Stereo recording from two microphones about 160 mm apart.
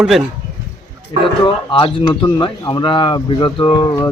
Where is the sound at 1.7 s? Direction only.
30° left (ahead or behind).